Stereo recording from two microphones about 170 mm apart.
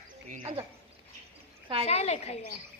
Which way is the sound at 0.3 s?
50° right (ahead or behind).